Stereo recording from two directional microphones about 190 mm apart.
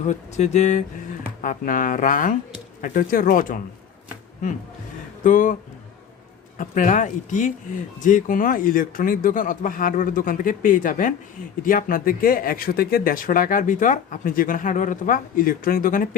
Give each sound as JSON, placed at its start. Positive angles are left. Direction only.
{"t": 0.0, "sound": "speech", "side_deg": 40}
{"t": 5.2, "sound": "speech", "side_deg": 45}
{"t": 6.6, "sound": "speech", "side_deg": 40}